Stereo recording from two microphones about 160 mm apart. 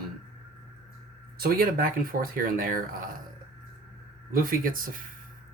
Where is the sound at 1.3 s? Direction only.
65° right (ahead or behind).